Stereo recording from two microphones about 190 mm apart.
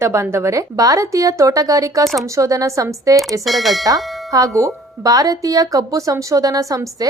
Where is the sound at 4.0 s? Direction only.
Centre (ahead or behind).